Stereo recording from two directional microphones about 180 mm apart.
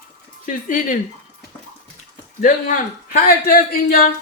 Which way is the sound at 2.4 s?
50° left (ahead or behind).